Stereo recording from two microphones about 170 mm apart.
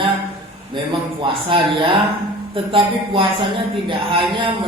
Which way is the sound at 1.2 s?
30° right (ahead or behind).